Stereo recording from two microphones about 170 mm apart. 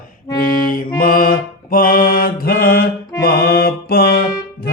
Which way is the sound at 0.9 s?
55° left (ahead or behind).